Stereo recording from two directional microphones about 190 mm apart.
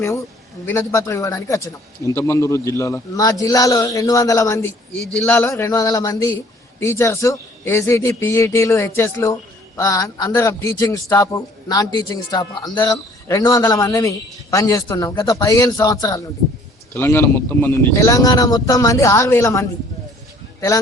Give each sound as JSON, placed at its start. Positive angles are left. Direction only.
{"t": 0.6, "sound": "a man's voice", "side_deg": 10}